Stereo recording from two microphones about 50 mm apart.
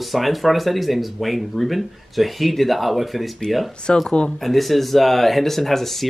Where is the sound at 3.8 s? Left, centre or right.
Centre.